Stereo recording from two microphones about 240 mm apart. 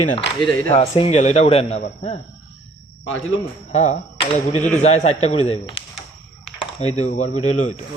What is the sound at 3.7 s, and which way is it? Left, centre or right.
A man's voice, left.